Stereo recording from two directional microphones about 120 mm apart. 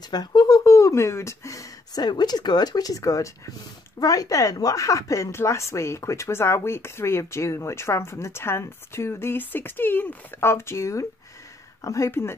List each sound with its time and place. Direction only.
0.1 s speech: 35° left (ahead or behind)